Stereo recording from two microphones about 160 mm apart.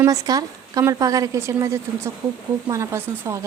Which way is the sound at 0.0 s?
20° right (ahead or behind).